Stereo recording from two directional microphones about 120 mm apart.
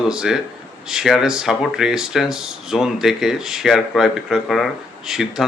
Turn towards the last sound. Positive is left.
turn(degrees=-5)  # may be behind; listen again after turning